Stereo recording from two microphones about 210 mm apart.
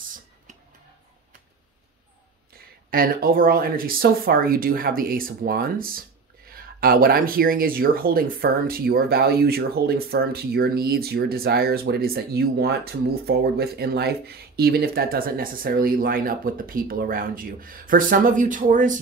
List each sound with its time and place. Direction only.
2.9 s speech: 45° right (ahead or behind)